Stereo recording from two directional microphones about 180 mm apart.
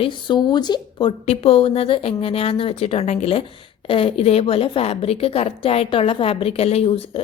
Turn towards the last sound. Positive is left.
turn(degrees=30)  # may be behind; listen again after turning